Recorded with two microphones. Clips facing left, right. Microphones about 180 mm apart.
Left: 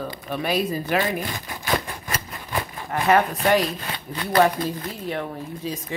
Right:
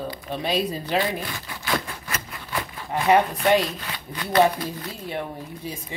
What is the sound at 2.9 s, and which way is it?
Speech, 15° right (ahead or behind).